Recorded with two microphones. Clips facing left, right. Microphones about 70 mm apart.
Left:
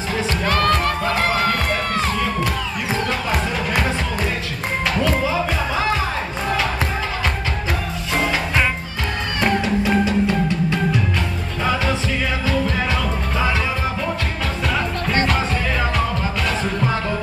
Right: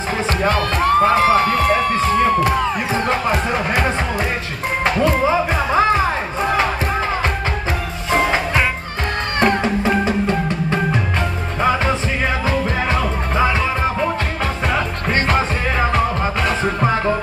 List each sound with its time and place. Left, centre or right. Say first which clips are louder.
0.5 s music: even; left
1.0 s a sound: right 6 dB; right
5.0 s music: right 5 dB; right
9.4 s music: right 2 dB; right
14.7 s music: left 1 dB; right
16.4 s music: right 4 dB; right